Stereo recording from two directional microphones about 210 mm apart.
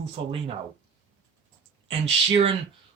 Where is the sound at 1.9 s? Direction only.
30° right (ahead or behind).